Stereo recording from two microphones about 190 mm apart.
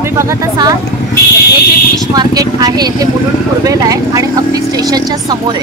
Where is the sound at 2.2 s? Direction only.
20° right (ahead or behind).